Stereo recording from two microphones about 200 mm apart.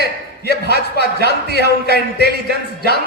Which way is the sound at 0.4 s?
55° left (ahead or behind).